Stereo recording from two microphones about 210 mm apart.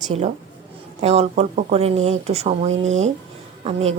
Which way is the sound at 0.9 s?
30° right (ahead or behind).